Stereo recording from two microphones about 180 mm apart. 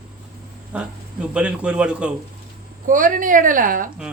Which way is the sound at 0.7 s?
5° right (ahead or behind).